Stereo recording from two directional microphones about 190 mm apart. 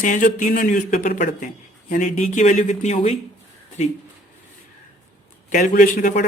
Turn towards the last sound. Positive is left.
turn(degrees=45)  # may be behind; listen again after turning